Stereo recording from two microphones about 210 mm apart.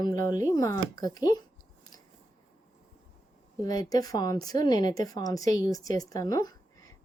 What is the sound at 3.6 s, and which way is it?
A woman's voice, 15° left (ahead or behind).